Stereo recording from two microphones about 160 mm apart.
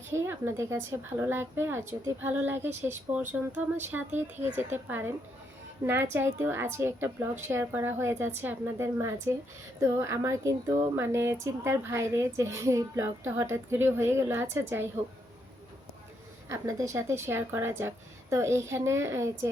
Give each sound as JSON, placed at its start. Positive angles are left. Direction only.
{"t": 0.1, "sound": "speech", "side_deg": -15}
{"t": 16.5, "sound": "speech", "side_deg": -20}